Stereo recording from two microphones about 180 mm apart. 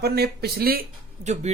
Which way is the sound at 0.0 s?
60° right (ahead or behind).